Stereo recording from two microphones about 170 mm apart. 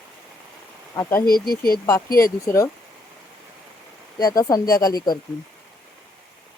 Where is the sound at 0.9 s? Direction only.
15° left (ahead or behind).